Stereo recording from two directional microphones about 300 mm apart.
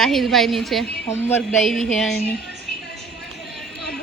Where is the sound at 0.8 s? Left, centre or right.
Left.